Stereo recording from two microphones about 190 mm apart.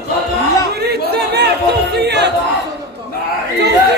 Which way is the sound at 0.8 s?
60° right (ahead or behind).